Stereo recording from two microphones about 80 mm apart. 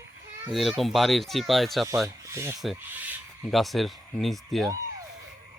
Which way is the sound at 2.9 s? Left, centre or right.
Right.